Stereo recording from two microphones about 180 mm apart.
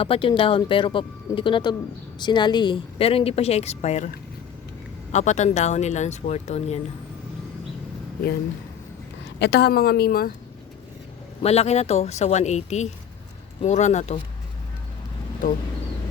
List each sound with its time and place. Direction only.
0.0 s speech: 30° left (ahead or behind)
5.1 s speech: 40° left (ahead or behind)
9.4 s a woman's voice: 65° left (ahead or behind)
11.4 s speech: 35° left (ahead or behind)